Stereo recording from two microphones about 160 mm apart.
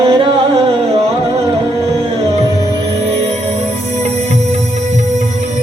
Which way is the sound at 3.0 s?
40° right (ahead or behind).